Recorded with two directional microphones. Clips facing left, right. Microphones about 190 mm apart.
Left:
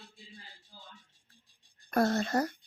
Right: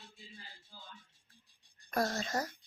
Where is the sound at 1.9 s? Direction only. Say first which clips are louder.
Left 6 dB; 55° left (ahead or behind).